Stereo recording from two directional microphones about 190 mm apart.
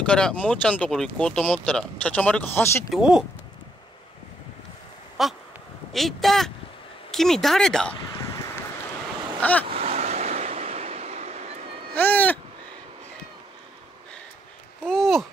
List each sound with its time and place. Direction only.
0.0 s speech: 5° left (ahead or behind)
2.9 s speech: 5° right (ahead or behind)
5.2 s speech: centre (ahead or behind)
9.4 s speech: 10° left (ahead or behind)
9.7 s vehicle: 35° right (ahead or behind)
11.9 s speech: 10° left (ahead or behind)
14.9 s speech: centre (ahead or behind)